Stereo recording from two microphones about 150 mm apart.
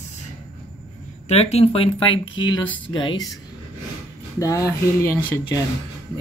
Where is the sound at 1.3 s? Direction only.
45° left (ahead or behind).